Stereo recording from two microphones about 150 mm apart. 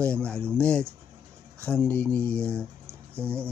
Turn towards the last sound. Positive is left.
turn(degrees=-15)  # may be behind; listen again after turning